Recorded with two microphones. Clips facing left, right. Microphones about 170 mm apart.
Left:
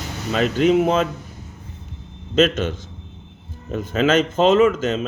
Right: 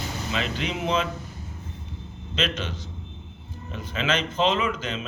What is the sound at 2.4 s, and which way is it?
Speech, 50° left (ahead or behind).